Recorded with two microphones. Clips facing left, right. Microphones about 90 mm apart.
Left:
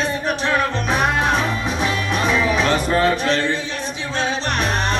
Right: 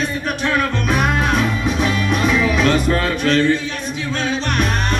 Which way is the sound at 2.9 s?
25° left (ahead or behind).